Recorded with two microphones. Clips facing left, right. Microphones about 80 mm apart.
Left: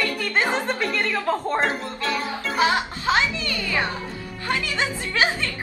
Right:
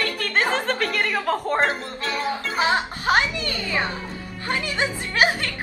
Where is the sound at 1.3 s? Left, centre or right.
Centre.